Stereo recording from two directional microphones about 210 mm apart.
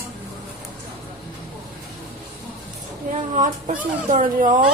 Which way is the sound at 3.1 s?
40° right (ahead or behind).